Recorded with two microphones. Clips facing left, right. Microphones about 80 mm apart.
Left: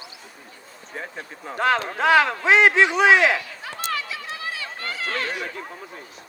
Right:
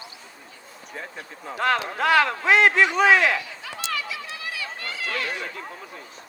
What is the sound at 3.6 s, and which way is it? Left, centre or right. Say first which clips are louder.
Run: left 2 dB; left.